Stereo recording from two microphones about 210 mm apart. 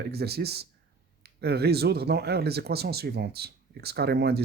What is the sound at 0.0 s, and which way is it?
Speech, 50° right (ahead or behind).